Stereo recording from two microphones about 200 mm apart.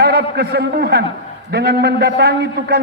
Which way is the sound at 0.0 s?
55° right (ahead or behind).